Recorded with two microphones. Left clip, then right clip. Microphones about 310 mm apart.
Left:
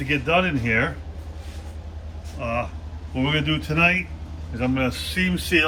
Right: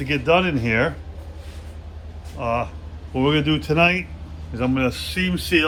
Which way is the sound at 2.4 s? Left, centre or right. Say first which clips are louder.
Right 3 dB; centre.